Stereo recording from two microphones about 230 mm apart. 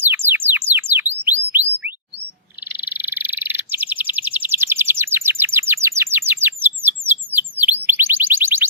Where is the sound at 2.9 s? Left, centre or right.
Centre.